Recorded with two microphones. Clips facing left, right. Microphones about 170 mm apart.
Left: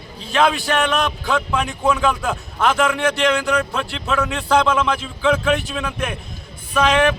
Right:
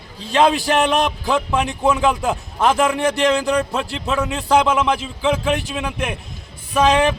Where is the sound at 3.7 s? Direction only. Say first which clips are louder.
Right 1 dB; 20° right (ahead or behind).